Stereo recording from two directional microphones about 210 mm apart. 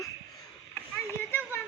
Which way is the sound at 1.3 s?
10° left (ahead or behind).